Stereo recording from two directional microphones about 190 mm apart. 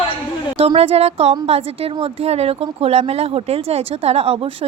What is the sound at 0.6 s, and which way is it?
Speech, 30° right (ahead or behind).